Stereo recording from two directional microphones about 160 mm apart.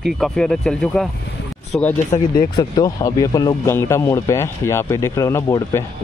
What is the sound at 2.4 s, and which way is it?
A man's voice, 25° left (ahead or behind).